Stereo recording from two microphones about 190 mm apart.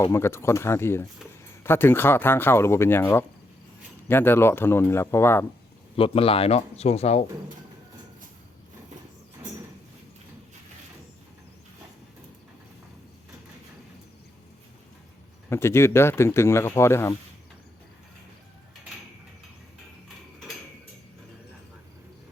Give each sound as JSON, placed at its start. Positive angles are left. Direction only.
{"t": 0.0, "sound": "speech", "side_deg": 15}
{"t": 6.0, "sound": "speech", "side_deg": 30}
{"t": 15.4, "sound": "speech", "side_deg": 15}